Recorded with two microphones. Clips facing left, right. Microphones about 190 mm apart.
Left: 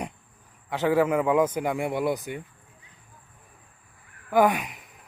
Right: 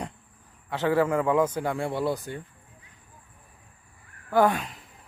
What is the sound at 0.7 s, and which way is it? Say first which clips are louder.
Speech: left 1 dB; 15° left (ahead or behind).